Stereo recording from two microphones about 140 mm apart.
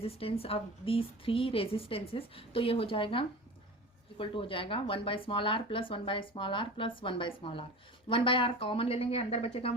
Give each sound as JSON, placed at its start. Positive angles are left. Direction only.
{"t": 0.0, "sound": "speech", "side_deg": 45}